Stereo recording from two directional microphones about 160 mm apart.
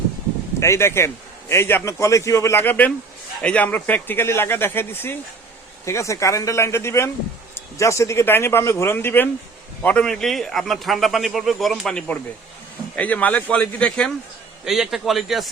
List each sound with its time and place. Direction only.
0.6 s a man's voice: 15° left (ahead or behind); by 15.4 s centre (ahead or behind)